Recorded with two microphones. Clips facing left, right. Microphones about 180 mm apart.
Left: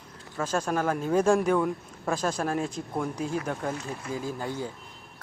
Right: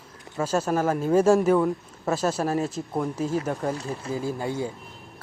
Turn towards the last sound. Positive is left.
turn(degrees=-10)  # may be behind; listen again after turning